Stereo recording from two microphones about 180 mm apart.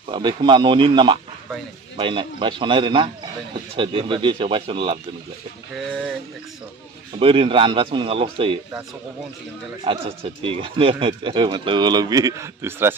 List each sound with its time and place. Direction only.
0.1 s speech: 25° right (ahead or behind)
7.2 s speech: 30° right (ahead or behind)
9.8 s speech: 30° right (ahead or behind); by 12.9 s 15° right (ahead or behind)